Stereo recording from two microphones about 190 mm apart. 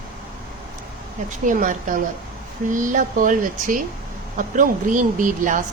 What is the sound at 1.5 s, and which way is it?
Speech, 45° right (ahead or behind).